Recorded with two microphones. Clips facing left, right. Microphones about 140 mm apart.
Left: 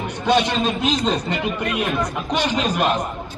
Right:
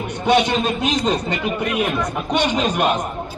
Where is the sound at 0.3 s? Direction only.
5° right (ahead or behind).